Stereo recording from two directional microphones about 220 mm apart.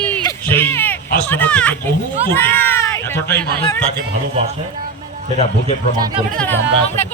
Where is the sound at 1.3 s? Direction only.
5° left (ahead or behind).